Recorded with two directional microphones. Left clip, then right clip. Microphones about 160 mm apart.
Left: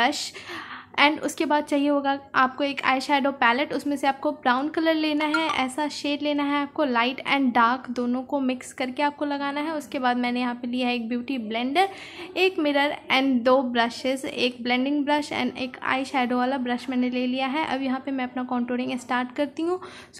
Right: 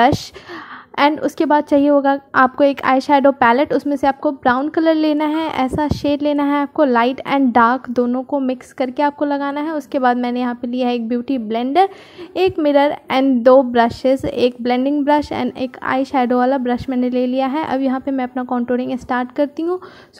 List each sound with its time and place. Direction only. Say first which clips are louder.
1.1 s a woman's voice: right 8 dB; 40° right (ahead or behind)
8.1 s a woman's voice: right 7 dB; 30° right (ahead or behind)